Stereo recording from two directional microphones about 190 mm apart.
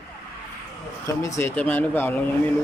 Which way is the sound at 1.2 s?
15° left (ahead or behind).